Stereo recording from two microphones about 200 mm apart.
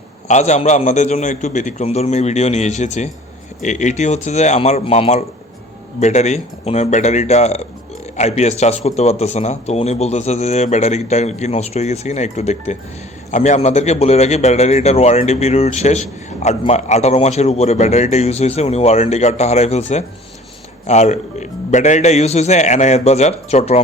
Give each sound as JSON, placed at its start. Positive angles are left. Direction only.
{"t": 0.3, "sound": "a man's voice", "side_deg": 35}